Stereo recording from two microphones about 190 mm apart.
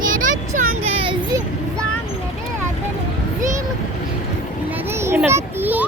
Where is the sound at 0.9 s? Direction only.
25° right (ahead or behind).